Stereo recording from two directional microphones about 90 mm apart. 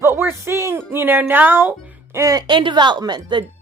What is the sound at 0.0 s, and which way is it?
Speech, 25° right (ahead or behind).